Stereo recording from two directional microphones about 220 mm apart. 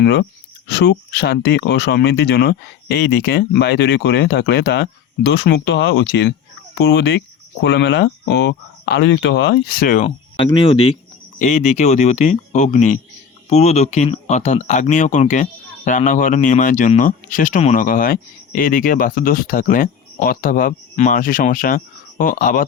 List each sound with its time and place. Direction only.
0.0 s speech: 50° left (ahead or behind)
10.3 s speech: 25° left (ahead or behind); by 22.6 s 40° left (ahead or behind)